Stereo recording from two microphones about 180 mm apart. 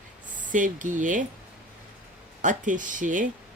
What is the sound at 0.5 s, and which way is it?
Speech, 45° right (ahead or behind).